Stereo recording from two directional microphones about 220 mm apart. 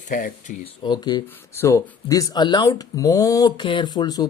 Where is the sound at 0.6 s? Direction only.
20° left (ahead or behind).